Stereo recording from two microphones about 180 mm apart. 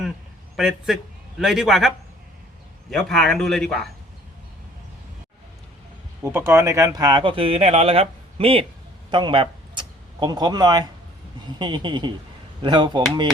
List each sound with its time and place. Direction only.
0.5 s speech: centre (ahead or behind)
2.9 s speech: centre (ahead or behind)
6.2 s speech: 15° right (ahead or behind); by 8.6 s 30° right (ahead or behind)
9.0 s a sound: 25° right (ahead or behind)
11.6 s speech: 25° right (ahead or behind)